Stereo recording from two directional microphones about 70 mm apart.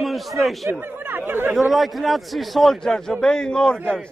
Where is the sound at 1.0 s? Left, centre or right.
Right.